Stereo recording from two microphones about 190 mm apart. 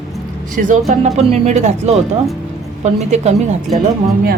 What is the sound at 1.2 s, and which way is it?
Speech, 35° right (ahead or behind).